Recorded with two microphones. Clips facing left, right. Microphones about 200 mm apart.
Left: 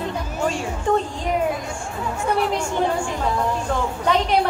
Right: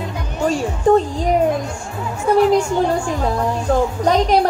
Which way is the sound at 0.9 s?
40° right (ahead or behind).